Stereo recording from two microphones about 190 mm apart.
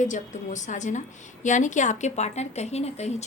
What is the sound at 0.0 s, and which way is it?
A woman's voice, 40° left (ahead or behind).